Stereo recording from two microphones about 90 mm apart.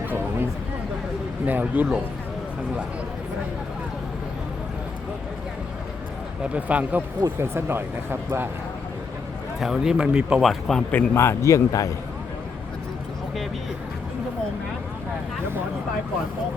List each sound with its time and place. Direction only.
0.0 s a sound: 20° right (ahead or behind)
1.5 s speech: 20° right (ahead or behind)
6.5 s speech: 15° right (ahead or behind)
7.3 s speech: 25° right (ahead or behind)
9.6 s speech: 5° right (ahead or behind)
10.4 s speech: centre (ahead or behind)
10.9 s a man's voice: 30° left (ahead or behind)